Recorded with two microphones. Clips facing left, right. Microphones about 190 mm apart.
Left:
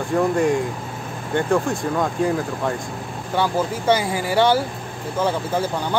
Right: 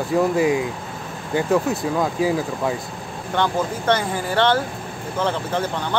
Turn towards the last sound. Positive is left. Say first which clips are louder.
# left 1 dB
turn(degrees=10)  # may be behind; listen again after turning